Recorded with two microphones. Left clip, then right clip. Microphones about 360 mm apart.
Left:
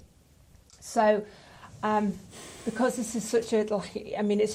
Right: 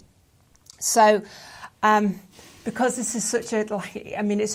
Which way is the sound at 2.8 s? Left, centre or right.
Centre.